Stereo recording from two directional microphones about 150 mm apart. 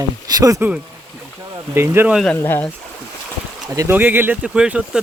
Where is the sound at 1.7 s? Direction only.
15° right (ahead or behind).